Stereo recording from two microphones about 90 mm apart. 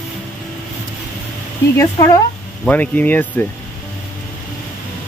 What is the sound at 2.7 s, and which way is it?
Speech, 20° left (ahead or behind).